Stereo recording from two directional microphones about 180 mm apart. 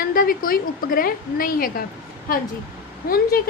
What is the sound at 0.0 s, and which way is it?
A woman's voice, 55° left (ahead or behind).